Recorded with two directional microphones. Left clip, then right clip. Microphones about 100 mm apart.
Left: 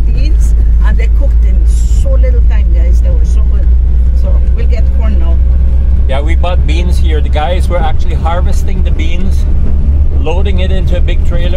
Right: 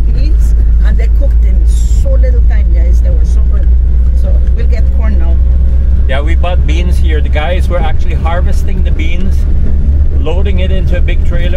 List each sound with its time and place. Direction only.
6.0 s vehicle: centre (ahead or behind)
10.2 s speech: 15° left (ahead or behind)